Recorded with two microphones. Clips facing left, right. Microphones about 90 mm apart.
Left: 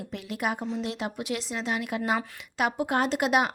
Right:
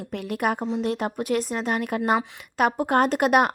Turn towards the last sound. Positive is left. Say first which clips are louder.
# right 5 dB
turn(degrees=-50)  # may be behind; listen again after turning